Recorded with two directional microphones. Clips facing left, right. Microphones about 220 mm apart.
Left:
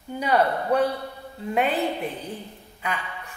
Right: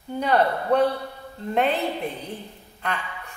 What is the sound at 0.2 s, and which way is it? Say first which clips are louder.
Speech: right 1 dB; 10° left (ahead or behind).